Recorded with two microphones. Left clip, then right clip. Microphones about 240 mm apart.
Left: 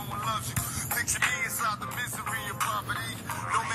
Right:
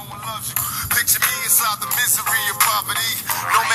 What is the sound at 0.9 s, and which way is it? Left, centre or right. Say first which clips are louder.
Music: right 7 dB; right.